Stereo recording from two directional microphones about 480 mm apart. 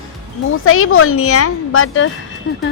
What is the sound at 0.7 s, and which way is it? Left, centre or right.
A woman's voice, left.